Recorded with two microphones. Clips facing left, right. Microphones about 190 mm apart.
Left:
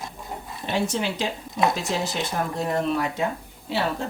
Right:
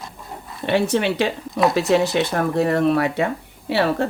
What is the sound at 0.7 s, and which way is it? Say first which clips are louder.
Speech: right 7 dB; 65° right (ahead or behind).